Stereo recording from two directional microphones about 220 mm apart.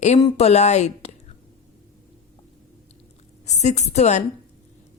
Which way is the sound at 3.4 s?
30° left (ahead or behind).